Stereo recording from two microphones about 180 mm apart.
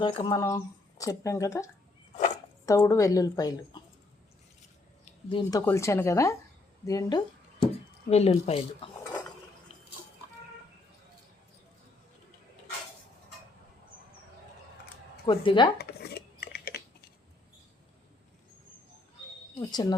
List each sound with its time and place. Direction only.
0.0 s a woman's voice: 25° left (ahead or behind)
5.3 s speech: 20° left (ahead or behind)
8.1 s speech: 35° left (ahead or behind)
15.3 s a woman's voice: 25° left (ahead or behind)
15.8 s a sound: 60° left (ahead or behind)
19.5 s speech: 20° left (ahead or behind)